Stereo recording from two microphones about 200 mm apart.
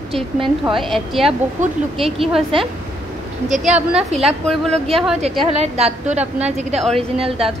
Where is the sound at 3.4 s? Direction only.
35° right (ahead or behind).